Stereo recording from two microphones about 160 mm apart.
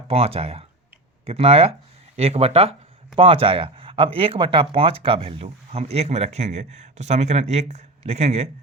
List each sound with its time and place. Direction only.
0.1 s speech: 40° right (ahead or behind)